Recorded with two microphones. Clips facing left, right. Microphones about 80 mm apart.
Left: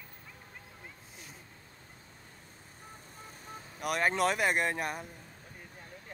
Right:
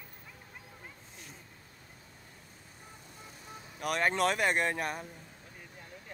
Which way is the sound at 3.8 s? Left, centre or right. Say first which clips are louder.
Even; centre.